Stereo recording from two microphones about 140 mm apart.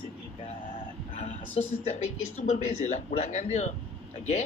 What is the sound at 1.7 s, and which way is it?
Speech, 55° left (ahead or behind).